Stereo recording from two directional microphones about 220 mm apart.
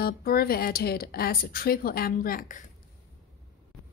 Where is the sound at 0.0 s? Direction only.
45° left (ahead or behind).